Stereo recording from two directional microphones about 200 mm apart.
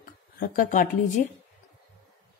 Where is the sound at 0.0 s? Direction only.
45° left (ahead or behind).